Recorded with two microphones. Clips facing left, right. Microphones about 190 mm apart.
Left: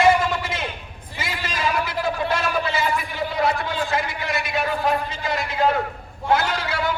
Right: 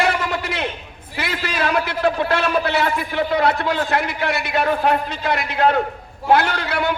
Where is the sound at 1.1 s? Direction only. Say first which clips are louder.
Right 5 dB; 65° right (ahead or behind).